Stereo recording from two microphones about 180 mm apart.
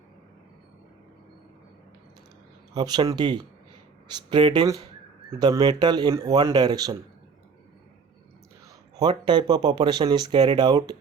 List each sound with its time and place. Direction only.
2.7 s speech: 25° right (ahead or behind)
9.0 s speech: 25° right (ahead or behind)